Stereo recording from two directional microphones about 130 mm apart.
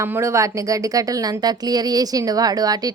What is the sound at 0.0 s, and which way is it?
A woman's voice, 20° right (ahead or behind).